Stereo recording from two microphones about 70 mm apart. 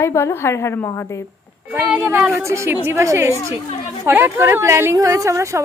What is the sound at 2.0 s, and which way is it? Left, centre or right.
A woman's voice, right.